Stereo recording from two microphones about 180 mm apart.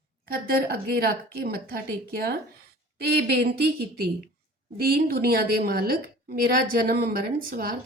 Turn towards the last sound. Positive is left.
turn(degrees=-55)  # may be behind; listen again after turning